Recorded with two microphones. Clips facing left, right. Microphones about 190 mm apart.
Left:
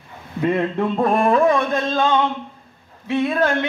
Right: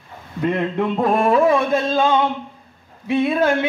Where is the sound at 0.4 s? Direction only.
Centre (ahead or behind).